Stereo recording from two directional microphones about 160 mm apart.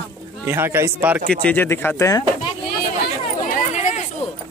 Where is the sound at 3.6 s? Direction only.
45° left (ahead or behind).